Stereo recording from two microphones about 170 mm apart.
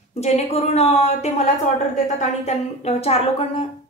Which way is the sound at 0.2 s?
40° left (ahead or behind).